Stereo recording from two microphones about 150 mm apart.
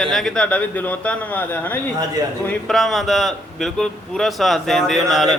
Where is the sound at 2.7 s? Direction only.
Centre (ahead or behind).